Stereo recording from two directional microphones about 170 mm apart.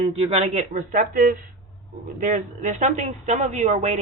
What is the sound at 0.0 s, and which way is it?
A woman's voice, 35° right (ahead or behind).